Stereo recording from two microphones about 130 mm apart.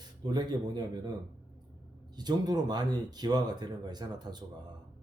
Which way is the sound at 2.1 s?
30° right (ahead or behind).